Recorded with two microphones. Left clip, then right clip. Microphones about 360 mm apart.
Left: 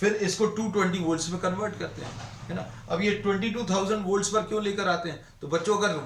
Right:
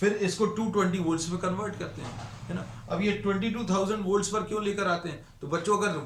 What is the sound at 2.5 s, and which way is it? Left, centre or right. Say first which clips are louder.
A man's voice: left 3 dB; centre.